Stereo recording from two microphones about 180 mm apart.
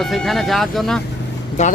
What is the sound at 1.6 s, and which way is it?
Speech, 40° left (ahead or behind).